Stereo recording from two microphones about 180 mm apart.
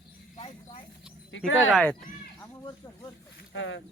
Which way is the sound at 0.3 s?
35° left (ahead or behind).